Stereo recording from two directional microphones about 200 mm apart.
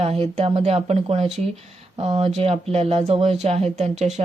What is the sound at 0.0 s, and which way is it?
Speech, 30° right (ahead or behind).